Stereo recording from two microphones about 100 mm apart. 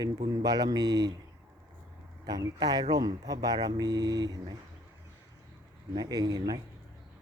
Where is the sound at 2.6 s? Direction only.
45° right (ahead or behind).